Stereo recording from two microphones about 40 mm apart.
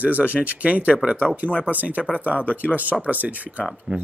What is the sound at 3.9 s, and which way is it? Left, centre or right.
Speech, right.